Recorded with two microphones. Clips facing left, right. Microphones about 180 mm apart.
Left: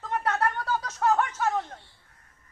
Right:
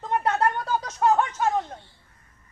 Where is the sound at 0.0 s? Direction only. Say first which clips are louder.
Right 4 dB; 20° right (ahead or behind).